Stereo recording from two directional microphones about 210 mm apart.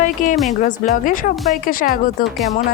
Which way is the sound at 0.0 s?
40° left (ahead or behind).